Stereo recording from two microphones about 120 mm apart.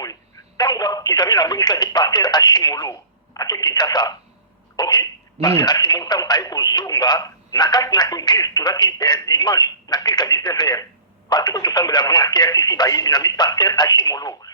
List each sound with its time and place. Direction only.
0.0 s speech: 30° left (ahead or behind)
4.8 s a sound: 35° left (ahead or behind)
5.5 s speech: 35° left (ahead or behind)